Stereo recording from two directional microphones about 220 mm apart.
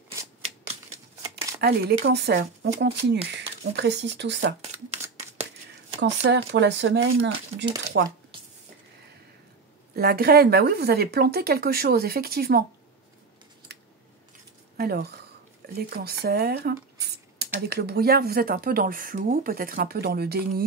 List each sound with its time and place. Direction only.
0.4 s shuffling cards: 30° right (ahead or behind)
1.6 s speech: 50° right (ahead or behind)
5.9 s speech: 50° right (ahead or behind)
9.9 s speech: 45° right (ahead or behind)
14.8 s speech: 45° right (ahead or behind)